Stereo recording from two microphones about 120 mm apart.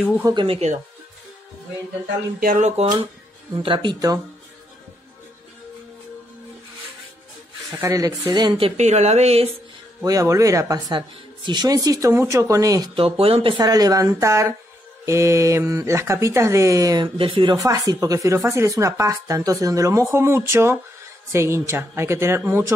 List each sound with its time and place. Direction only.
0.2 s speech: 30° right (ahead or behind)
0.5 s speech: 65° right (ahead or behind)
2.8 s speech: 60° right (ahead or behind)
3.5 s speech: 45° right (ahead or behind)
7.8 s speech: 30° right (ahead or behind)
8.5 s speech: 60° right (ahead or behind)
10.0 s speech: 30° right (ahead or behind)
11.0 s speech: 40° right (ahead or behind)
12.9 s speech: 50° right (ahead or behind)
13.6 s speech: 30° right (ahead or behind)
17.0 s speech: 45° right (ahead or behind)
17.6 s speech: 30° right (ahead or behind)